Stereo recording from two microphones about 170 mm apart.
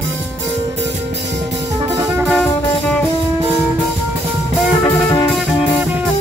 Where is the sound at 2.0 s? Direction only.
10° right (ahead or behind).